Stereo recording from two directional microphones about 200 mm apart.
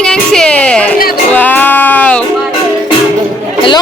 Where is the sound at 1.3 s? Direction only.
10° left (ahead or behind).